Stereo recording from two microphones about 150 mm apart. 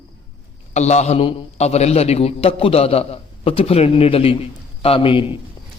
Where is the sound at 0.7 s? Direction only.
50° left (ahead or behind).